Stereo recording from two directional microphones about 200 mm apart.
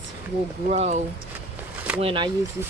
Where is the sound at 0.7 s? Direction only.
35° right (ahead or behind).